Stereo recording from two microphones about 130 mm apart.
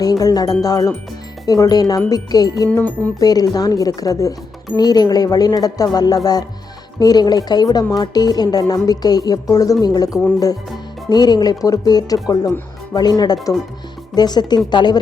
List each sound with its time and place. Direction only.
0.0 s speech: 30° left (ahead or behind)
2.6 s music: 15° left (ahead or behind)
3.2 s speech: 30° left (ahead or behind)